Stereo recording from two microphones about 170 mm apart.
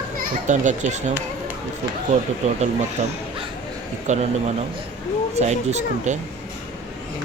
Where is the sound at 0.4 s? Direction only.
45° right (ahead or behind).